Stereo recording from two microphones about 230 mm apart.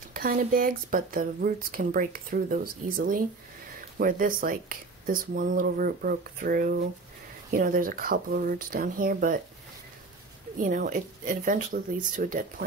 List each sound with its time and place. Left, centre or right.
0.1 s speech: right
10.6 s speech: right